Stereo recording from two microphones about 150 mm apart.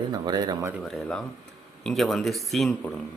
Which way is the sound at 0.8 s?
5° left (ahead or behind).